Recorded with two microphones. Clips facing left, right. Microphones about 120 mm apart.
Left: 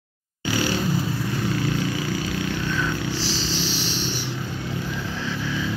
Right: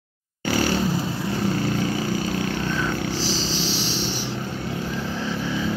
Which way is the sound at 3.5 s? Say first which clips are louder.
Right 1 dB; 90° right.